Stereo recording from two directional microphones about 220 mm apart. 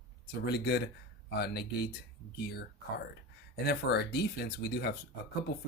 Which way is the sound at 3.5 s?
50° left (ahead or behind).